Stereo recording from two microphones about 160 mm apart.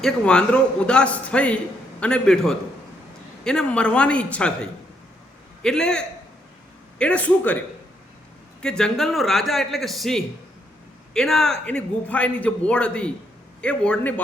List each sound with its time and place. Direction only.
0.0 s a man's voice: 5° left (ahead or behind)
8.6 s a man's voice: 5° left (ahead or behind)